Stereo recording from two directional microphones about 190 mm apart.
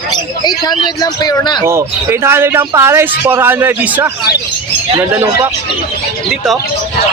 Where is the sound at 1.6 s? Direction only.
15° right (ahead or behind).